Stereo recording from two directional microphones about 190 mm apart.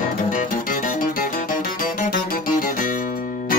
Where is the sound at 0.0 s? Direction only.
45° left (ahead or behind).